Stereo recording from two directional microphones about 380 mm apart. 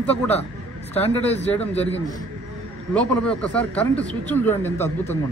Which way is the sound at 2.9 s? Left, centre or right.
Centre.